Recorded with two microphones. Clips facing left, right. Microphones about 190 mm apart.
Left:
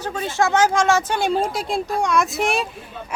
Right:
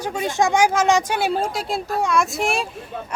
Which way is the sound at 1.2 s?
5° right (ahead or behind).